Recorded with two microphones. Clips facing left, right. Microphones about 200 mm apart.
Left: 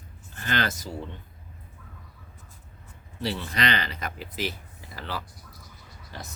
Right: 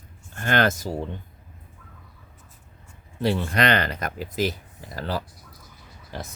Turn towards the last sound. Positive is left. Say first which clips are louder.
# right 6 dB
turn(degrees=-45)  # may be behind; listen again after turning